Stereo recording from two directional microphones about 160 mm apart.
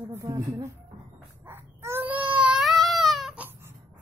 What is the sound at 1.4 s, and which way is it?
Baby cry, 15° right (ahead or behind).